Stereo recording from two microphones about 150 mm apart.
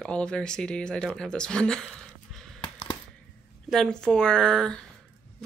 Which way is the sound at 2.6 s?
35° left (ahead or behind).